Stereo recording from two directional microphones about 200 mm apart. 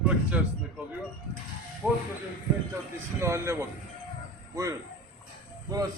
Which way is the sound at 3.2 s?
15° right (ahead or behind).